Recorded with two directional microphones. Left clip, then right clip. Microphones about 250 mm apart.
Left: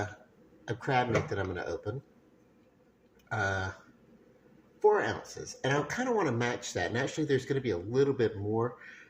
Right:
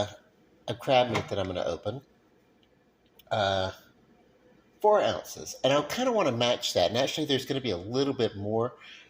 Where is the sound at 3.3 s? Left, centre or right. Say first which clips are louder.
Right 5 dB; centre.